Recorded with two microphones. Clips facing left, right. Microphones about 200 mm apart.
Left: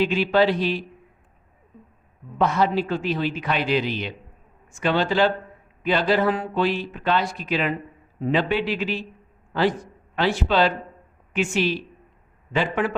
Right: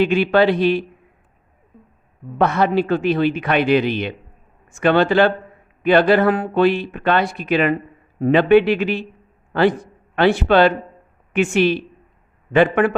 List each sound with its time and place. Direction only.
0.0 s speech: 60° right (ahead or behind)
2.4 s a man's voice: 60° right (ahead or behind)